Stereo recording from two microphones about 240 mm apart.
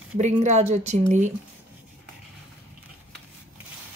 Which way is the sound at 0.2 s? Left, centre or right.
Right.